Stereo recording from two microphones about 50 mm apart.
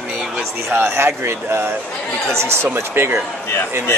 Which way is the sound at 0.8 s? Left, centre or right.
Right.